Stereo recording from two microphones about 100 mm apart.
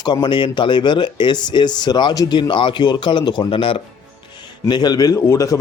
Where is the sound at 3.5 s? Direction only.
60° left (ahead or behind).